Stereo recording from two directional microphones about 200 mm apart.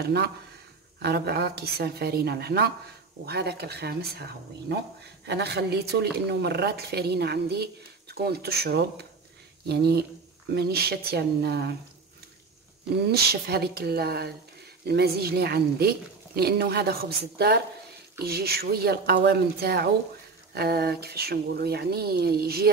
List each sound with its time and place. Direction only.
0.0 s speech: 55° right (ahead or behind)
13.1 s speech: 50° right (ahead or behind)